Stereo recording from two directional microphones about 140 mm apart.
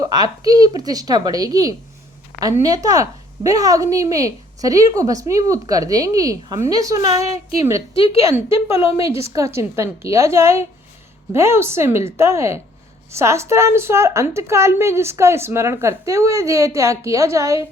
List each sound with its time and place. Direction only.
0.0 s a woman's voice: 30° right (ahead or behind)
7.0 s a woman's voice: 50° left (ahead or behind)
7.5 s a woman's voice: 20° right (ahead or behind)